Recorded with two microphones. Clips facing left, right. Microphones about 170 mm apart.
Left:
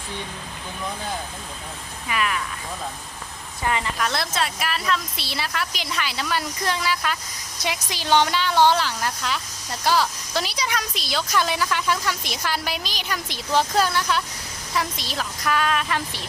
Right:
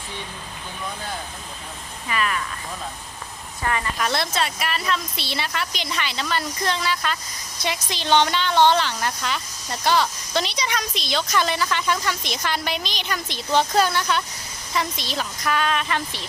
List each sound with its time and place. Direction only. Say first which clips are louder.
2.0 s speech: even; 10° left (ahead or behind)
3.6 s a woman's voice: left 1 dB; 20° left (ahead or behind)
4.0 s speech: right 4 dB; centre (ahead or behind)